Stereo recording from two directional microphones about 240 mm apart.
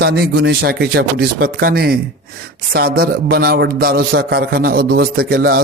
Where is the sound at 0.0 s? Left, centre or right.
Right.